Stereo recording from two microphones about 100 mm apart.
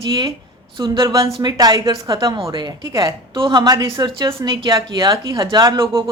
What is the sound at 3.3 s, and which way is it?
A woman's voice, 55° right (ahead or behind).